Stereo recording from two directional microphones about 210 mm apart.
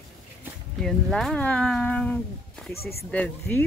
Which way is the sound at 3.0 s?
5° left (ahead or behind).